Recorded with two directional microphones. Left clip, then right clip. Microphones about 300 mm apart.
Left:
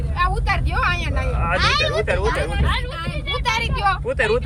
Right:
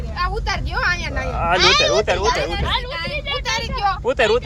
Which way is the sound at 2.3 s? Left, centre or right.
Right.